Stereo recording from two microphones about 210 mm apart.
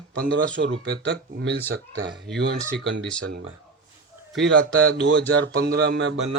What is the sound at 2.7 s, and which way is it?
Speech, 60° right (ahead or behind).